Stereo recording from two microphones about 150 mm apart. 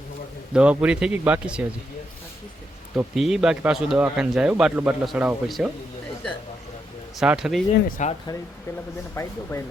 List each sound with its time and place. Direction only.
0.5 s speech: 10° right (ahead or behind)
2.9 s speech: 5° right (ahead or behind)
7.2 s speech: 5° right (ahead or behind)
7.9 s speech: 60° left (ahead or behind)
9.1 s speech: 15° left (ahead or behind)